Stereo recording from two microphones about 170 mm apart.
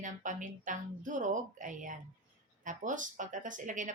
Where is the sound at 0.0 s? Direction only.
50° right (ahead or behind).